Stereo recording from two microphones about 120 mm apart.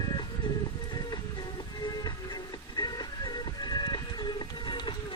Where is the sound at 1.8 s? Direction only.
35° left (ahead or behind).